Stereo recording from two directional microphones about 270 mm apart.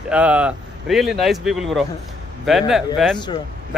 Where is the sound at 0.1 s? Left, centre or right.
Centre.